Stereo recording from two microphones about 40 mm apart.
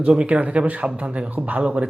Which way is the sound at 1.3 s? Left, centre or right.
Right.